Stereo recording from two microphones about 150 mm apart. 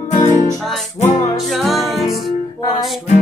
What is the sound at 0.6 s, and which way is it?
Music, centre (ahead or behind).